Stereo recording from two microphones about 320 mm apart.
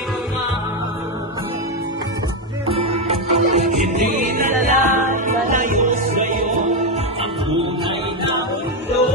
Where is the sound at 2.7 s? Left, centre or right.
Centre.